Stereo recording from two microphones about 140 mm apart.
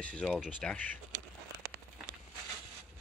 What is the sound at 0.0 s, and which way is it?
Speech, 5° left (ahead or behind).